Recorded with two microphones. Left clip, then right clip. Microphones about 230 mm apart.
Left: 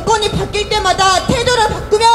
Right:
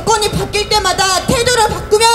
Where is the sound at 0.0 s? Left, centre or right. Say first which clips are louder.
Even; right.